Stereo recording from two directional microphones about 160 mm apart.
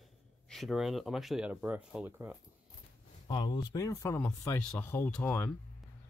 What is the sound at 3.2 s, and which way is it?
Speech, 30° left (ahead or behind).